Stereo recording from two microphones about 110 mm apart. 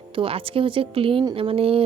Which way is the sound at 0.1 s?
55° right (ahead or behind).